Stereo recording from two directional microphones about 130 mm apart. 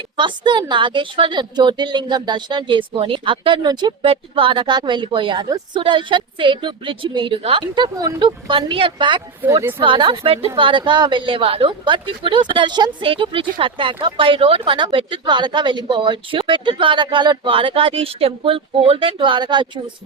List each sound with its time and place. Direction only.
0.2 s a woman's voice: 40° right (ahead or behind)
9.5 s speech: 20° right (ahead or behind)
9.8 s a woman's voice: 40° right (ahead or behind)